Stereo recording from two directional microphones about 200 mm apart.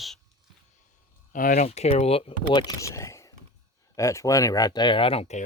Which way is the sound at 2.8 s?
15° left (ahead or behind).